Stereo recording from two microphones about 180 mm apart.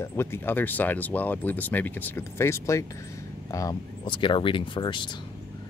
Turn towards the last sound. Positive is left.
turn(degrees=25)  # may be behind; listen again after turning